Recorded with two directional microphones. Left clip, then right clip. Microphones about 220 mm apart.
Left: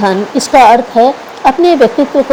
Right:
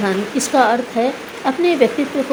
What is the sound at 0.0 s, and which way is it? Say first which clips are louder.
Speech: left 8 dB; 25° left (ahead or behind).